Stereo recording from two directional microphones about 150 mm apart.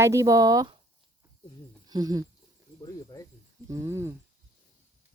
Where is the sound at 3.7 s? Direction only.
20° right (ahead or behind).